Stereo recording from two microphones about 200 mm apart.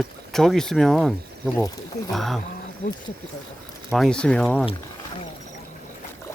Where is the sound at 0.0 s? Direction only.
Centre (ahead or behind).